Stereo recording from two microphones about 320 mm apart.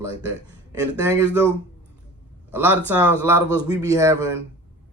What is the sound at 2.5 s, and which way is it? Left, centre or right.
Speech, centre.